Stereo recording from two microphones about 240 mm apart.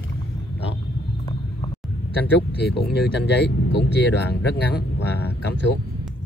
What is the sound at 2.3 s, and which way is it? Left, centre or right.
Speech, left.